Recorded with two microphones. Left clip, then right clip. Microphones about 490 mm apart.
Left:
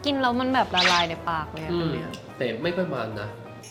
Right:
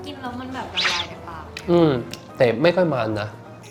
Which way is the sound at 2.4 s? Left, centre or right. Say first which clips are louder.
Right 10 dB; right.